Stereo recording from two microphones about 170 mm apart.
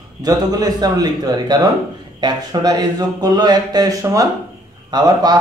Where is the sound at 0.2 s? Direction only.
20° right (ahead or behind).